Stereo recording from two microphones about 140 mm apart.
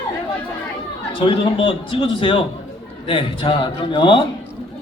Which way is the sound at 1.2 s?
40° left (ahead or behind).